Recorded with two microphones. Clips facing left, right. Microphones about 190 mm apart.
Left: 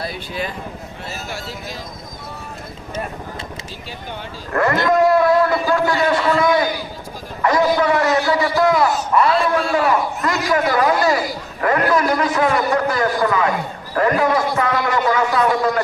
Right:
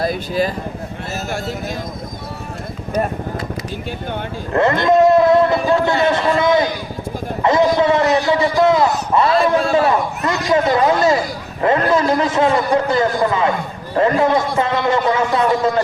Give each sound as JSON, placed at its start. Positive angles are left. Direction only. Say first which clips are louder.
{"t": 0.0, "sound": "speech", "louder": "right 8 dB", "side_deg": -40}
{"t": 4.5, "sound": "a man's voice", "louder": "right 3 dB", "side_deg": -25}
{"t": 9.3, "sound": "a man's voice", "louder": "right 3 dB", "side_deg": -40}
{"t": 9.7, "sound": "a man's voice", "louder": "right 2 dB", "side_deg": -25}